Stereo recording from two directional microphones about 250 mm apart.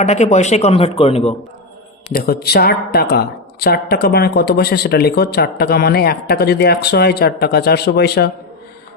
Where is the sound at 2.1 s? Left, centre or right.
Left.